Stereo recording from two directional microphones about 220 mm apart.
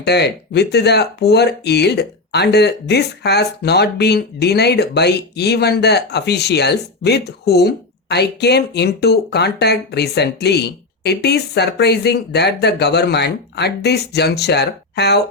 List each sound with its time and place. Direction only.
0.0 s speech: 50° left (ahead or behind)